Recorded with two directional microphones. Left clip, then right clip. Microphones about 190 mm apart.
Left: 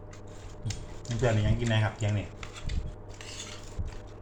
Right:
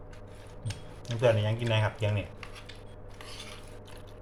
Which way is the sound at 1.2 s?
20° right (ahead or behind).